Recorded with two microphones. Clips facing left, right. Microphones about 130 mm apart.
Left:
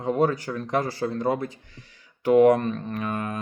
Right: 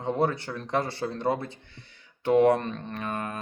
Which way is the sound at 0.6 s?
30° right (ahead or behind).